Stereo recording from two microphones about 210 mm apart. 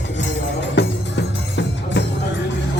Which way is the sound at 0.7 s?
55° left (ahead or behind).